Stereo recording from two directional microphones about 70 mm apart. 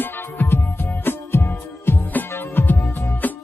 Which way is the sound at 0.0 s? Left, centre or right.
Left.